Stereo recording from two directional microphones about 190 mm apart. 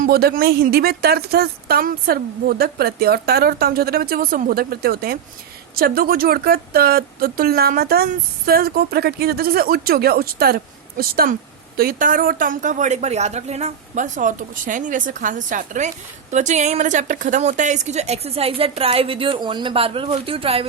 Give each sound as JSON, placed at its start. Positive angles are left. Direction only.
{"t": 0.0, "sound": "a woman's voice", "side_deg": -55}